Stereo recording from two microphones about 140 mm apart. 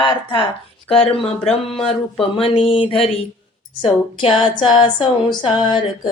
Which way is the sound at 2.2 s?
45° left (ahead or behind).